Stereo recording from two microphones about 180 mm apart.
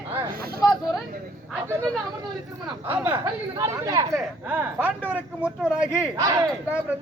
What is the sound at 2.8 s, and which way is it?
A woman's voice, 10° right (ahead or behind).